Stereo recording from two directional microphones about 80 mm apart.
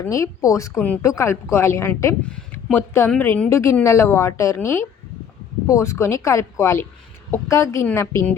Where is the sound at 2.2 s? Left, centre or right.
Centre.